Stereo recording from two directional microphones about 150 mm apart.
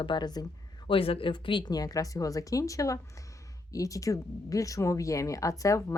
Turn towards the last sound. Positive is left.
turn(degrees=20)  # may be behind; listen again after turning